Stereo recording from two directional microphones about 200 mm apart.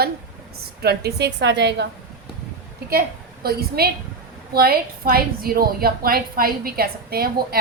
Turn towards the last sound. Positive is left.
turn(degrees=-50)  # may be behind; listen again after turning